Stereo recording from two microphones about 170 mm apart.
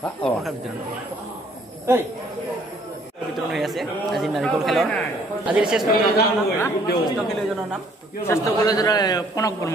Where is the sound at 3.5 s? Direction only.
Centre (ahead or behind).